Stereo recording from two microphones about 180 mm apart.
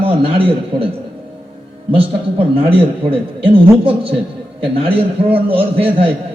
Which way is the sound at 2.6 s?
30° right (ahead or behind).